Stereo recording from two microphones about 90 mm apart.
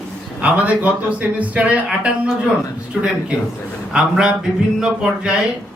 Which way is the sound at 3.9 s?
10° right (ahead or behind).